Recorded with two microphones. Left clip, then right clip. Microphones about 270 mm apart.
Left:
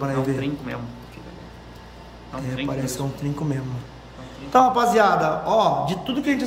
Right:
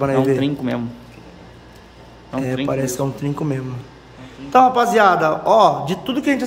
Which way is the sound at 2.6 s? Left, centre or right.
Centre.